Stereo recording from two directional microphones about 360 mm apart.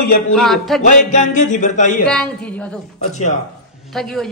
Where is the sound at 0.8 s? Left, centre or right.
Centre.